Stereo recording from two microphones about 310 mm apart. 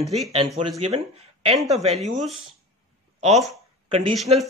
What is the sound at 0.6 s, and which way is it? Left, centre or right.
Speech, centre.